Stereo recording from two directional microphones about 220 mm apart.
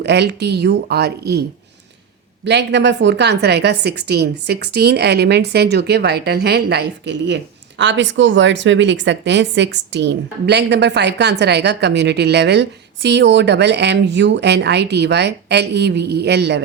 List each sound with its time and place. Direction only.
0.0 s a woman's voice: 50° right (ahead or behind)